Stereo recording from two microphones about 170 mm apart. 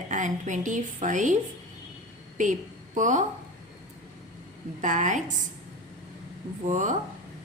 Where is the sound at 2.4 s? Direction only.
50° right (ahead or behind).